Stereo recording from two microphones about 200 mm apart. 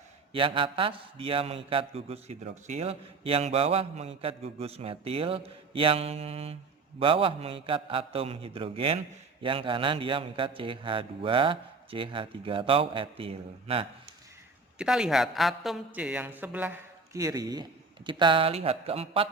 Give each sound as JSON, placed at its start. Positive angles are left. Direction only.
{"t": 0.3, "sound": "a man's voice", "side_deg": -25}
{"t": 14.8, "sound": "a woman's voice", "side_deg": -5}